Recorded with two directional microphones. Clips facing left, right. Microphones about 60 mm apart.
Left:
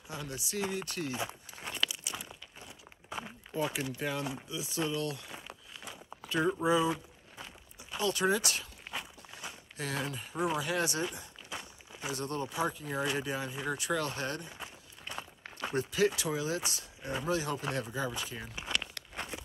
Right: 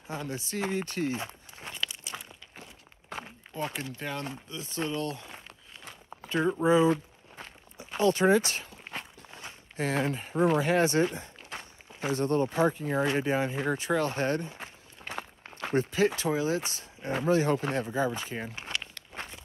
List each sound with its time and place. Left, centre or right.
0.1 s speech: right
2.1 s a sound: right
3.5 s speech: centre
6.6 s speech: right
6.9 s walk: right
10.3 s speech: right
15.5 s a sound: right
16.3 s speech: right